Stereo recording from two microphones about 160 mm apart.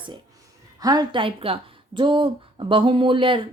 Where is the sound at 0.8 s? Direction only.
25° right (ahead or behind).